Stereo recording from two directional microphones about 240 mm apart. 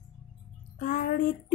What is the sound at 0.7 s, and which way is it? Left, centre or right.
Speech, left.